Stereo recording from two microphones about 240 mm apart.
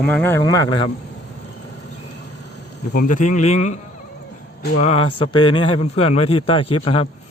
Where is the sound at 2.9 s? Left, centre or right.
Left.